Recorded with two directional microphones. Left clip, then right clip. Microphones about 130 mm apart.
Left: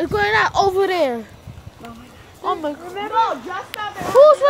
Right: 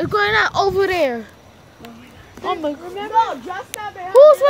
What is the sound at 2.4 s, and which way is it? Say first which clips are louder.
Speech: even; 25° right (ahead or behind).